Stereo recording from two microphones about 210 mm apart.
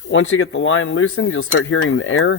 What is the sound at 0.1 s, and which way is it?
Speech, 80° left.